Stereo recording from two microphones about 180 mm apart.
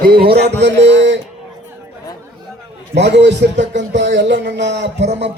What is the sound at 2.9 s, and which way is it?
A man's voice, 70° right (ahead or behind).